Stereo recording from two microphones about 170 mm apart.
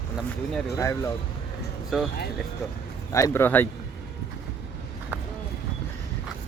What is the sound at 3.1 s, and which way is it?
Speech, 20° left (ahead or behind).